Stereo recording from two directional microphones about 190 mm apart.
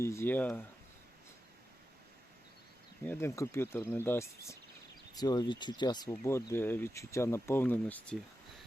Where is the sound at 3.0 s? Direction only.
10° left (ahead or behind).